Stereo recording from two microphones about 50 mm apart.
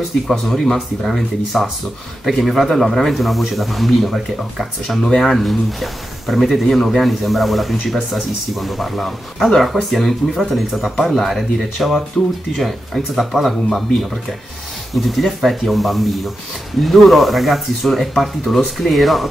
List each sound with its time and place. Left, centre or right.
0.3 s speech: centre
4.8 s speech: centre
5.3 s speech: centre
15.0 s speech: centre